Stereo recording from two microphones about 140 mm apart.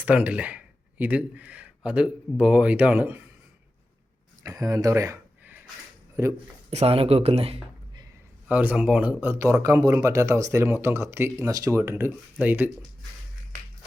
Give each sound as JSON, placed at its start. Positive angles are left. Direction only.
{"t": 0.0, "sound": "speech", "side_deg": -10}
{"t": 4.4, "sound": "speech", "side_deg": -25}
{"t": 6.7, "sound": "speech", "side_deg": -45}
{"t": 8.4, "sound": "speech", "side_deg": -10}